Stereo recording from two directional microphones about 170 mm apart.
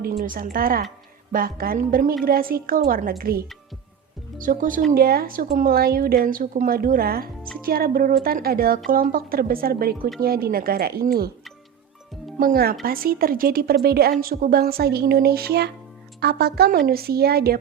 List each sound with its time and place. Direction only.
0.0 s a woman's voice: 60° right (ahead or behind)
12.4 s a woman's voice: 60° right (ahead or behind)